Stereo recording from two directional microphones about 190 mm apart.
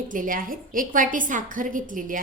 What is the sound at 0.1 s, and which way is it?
A woman's voice, 45° right (ahead or behind).